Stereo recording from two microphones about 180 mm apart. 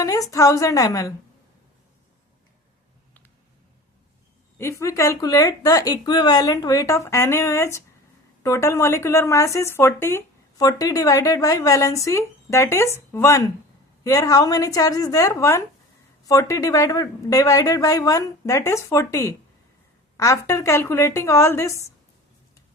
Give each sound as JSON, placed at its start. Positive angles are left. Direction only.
{"t": 0.0, "sound": "speech", "side_deg": 20}
{"t": 4.5, "sound": "speech", "side_deg": 15}